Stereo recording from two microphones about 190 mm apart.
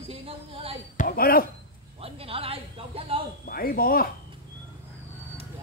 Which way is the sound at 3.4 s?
50° left (ahead or behind).